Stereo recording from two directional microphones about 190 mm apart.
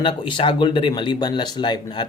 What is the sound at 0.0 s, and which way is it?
Speech, 25° left (ahead or behind).